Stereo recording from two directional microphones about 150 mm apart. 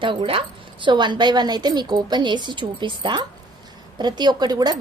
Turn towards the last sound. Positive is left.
turn(degrees=-25)  # may be behind; listen again after turning